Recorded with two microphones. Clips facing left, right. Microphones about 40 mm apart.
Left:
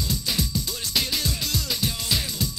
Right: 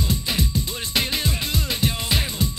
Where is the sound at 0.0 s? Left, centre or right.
Right.